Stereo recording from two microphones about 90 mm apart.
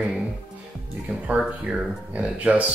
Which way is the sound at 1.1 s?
15° right (ahead or behind).